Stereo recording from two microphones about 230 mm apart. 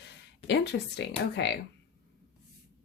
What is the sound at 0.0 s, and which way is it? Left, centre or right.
Speech, left.